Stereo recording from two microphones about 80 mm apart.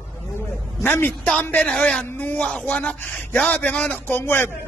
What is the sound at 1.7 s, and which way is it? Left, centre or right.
Speech, centre.